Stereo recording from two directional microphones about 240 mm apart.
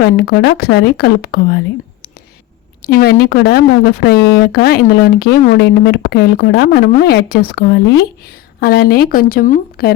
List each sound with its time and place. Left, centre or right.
0.0 s a woman's voice: left